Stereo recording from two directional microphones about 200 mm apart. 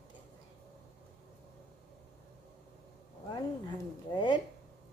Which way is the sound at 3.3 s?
20° left (ahead or behind).